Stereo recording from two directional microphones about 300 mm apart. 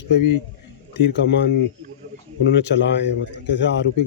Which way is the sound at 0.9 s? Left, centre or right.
Left.